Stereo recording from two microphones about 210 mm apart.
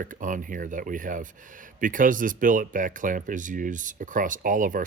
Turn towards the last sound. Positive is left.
turn(degrees=-40)  # may be behind; listen again after turning